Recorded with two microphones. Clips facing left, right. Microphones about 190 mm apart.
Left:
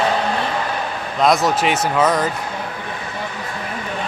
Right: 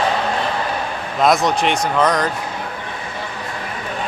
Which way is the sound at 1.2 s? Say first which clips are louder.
Even; centre (ahead or behind).